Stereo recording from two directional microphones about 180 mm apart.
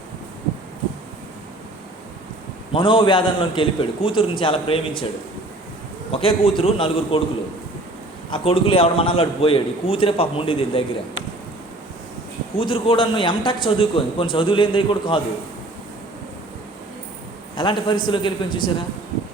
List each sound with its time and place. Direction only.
2.7 s a man's voice: 25° left (ahead or behind)
6.1 s a man's voice: 30° left (ahead or behind)
8.3 s a man's voice: 30° left (ahead or behind)
12.5 s a man's voice: 30° left (ahead or behind)
17.6 s a man's voice: 25° left (ahead or behind)